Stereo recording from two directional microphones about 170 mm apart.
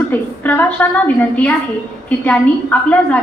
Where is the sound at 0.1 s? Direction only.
10° left (ahead or behind).